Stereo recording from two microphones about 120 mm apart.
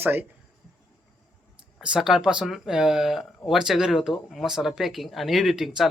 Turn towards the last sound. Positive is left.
turn(degrees=0)  # may be behind; listen again after turning